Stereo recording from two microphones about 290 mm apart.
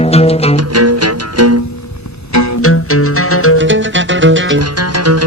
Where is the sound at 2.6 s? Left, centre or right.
Left.